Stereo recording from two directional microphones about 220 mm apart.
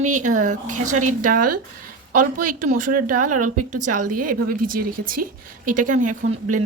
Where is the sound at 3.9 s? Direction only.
35° right (ahead or behind).